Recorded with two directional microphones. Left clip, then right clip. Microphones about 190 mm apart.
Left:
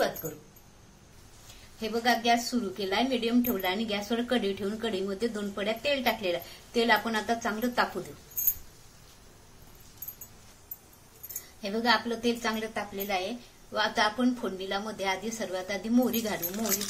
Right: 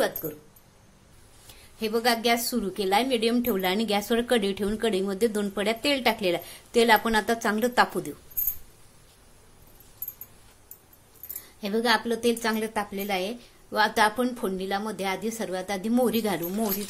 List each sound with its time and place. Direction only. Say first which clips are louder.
0.2 s a woman's voice: right 4 dB; 50° right (ahead or behind)
1.8 s a woman's voice: right 3 dB; 50° right (ahead or behind)
11.6 s a woman's voice: right 2 dB; 55° right (ahead or behind)